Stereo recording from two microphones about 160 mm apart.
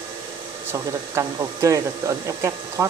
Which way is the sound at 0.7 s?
20° right (ahead or behind).